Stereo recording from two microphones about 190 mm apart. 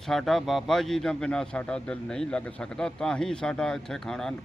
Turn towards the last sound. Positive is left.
turn(degrees=5)  # may be behind; listen again after turning